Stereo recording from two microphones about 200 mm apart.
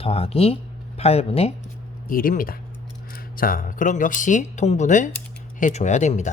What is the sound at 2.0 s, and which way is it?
Speech, 45° left (ahead or behind).